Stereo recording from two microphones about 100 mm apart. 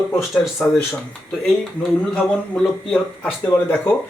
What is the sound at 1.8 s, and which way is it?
A man's voice, 5° left (ahead or behind).